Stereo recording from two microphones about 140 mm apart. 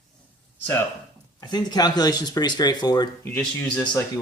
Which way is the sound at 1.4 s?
30° left (ahead or behind).